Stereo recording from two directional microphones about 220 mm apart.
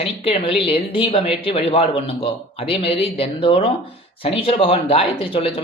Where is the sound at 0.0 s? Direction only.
25° left (ahead or behind).